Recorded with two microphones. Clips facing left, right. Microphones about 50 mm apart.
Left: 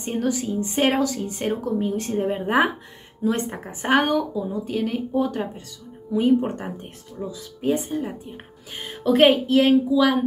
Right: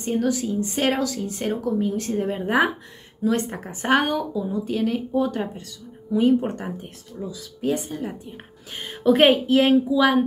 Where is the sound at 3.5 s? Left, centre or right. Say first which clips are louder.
Even; centre.